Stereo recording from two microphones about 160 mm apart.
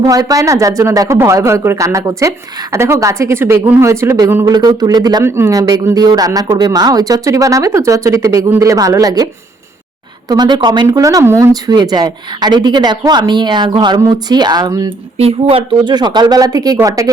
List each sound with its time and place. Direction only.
0.0 s speech: 25° right (ahead or behind)
15.2 s speech: 35° right (ahead or behind); by 17.1 s 20° right (ahead or behind)